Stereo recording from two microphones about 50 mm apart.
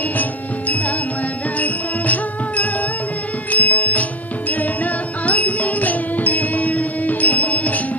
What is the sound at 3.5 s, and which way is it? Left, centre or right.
Music, left.